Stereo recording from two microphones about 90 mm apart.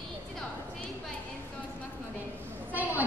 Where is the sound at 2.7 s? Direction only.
20° right (ahead or behind).